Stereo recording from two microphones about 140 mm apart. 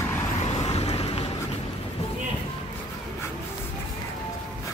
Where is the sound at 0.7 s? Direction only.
45° left (ahead or behind).